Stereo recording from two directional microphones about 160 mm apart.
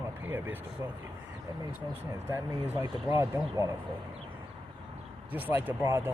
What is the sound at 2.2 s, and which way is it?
Speech, 20° right (ahead or behind).